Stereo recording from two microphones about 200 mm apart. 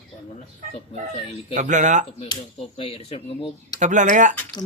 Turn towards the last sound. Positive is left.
turn(degrees=-40)  # may be behind; listen again after turning